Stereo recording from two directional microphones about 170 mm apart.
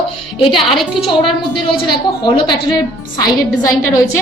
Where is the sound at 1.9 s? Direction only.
30° left (ahead or behind).